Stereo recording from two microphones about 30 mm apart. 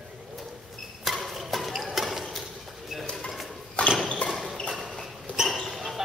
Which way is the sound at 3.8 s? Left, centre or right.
Left.